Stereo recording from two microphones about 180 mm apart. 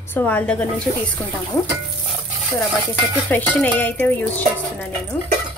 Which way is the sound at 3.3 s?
10° left (ahead or behind).